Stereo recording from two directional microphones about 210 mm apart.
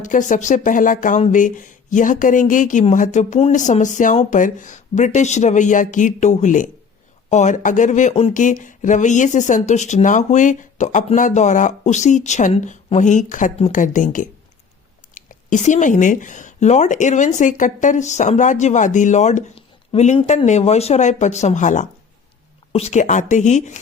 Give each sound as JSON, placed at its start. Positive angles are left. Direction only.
{"t": 0.0, "sound": "speech", "side_deg": 35}